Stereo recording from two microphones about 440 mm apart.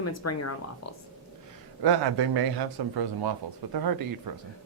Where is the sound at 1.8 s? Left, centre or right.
Right.